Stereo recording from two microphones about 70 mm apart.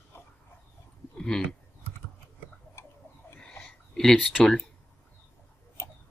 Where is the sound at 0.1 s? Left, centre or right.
Left.